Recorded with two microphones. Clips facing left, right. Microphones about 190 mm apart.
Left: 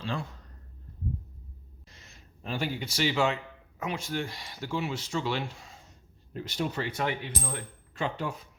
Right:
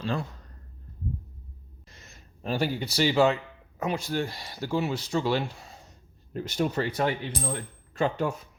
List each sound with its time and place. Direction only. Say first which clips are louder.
0.0 s speech: right 4 dB; 40° right (ahead or behind)
1.9 s speech: right 3 dB; 45° right (ahead or behind)